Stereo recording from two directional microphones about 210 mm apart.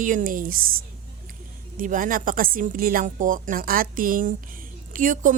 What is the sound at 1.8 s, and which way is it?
A woman's voice, 40° right (ahead or behind).